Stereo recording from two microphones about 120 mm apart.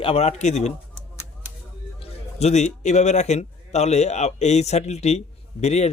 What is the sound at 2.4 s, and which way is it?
A man's voice, 70° left (ahead or behind).